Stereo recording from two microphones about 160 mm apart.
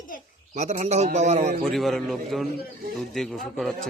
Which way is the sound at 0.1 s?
60° left (ahead or behind).